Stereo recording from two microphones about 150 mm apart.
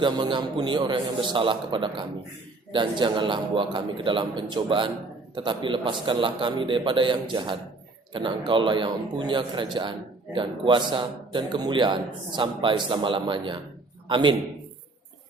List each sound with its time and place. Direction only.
0.0 s a man's voice: 30° right (ahead or behind)